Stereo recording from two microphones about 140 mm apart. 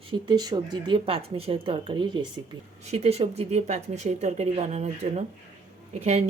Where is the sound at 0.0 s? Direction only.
35° right (ahead or behind).